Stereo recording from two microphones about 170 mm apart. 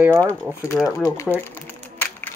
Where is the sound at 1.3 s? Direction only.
10° left (ahead or behind).